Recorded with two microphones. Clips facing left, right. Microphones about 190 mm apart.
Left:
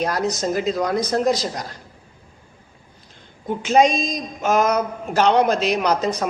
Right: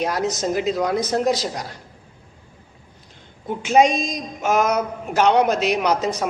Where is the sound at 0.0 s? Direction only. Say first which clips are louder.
Even; 10° right (ahead or behind).